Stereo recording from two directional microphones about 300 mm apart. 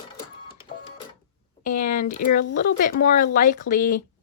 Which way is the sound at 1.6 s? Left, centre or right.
Left.